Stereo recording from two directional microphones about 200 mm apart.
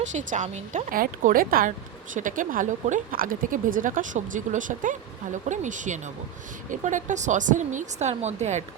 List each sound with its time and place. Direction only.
0.0 s speech: 35° right (ahead or behind)